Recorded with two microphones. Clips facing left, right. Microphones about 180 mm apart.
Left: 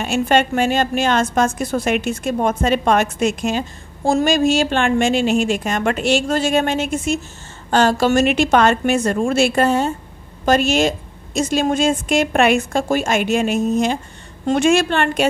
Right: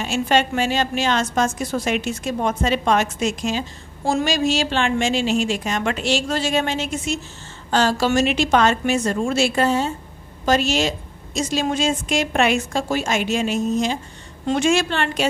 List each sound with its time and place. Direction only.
0.0 s a woman's voice: 55° left (ahead or behind)